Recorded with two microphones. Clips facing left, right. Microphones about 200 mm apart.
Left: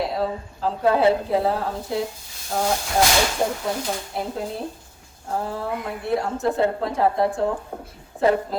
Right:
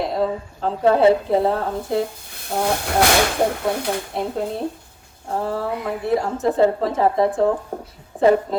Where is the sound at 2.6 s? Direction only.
60° right (ahead or behind).